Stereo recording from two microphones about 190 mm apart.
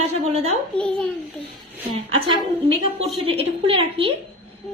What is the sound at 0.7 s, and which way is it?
Speech, 5° left (ahead or behind).